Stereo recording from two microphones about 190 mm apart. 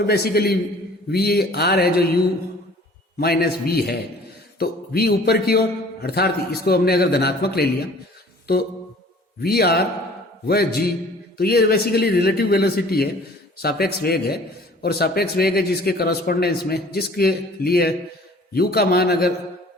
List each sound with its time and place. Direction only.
0.0 s a man's voice: 55° left (ahead or behind)
3.2 s a man's voice: 55° left (ahead or behind)
9.4 s a man's voice: 55° left (ahead or behind)